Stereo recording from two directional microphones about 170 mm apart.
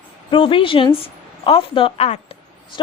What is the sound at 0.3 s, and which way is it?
A woman's voice, 30° left (ahead or behind).